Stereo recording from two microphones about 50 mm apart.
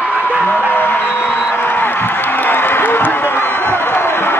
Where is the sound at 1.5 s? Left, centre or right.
Left.